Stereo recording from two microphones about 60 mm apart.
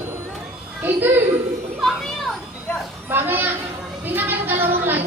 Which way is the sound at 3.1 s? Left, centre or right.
Right.